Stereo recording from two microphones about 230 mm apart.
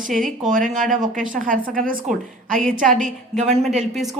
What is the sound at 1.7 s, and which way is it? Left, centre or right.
Speech, right.